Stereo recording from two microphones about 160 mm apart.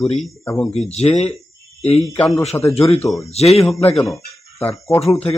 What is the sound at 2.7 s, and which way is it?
Speech, 40° left (ahead or behind).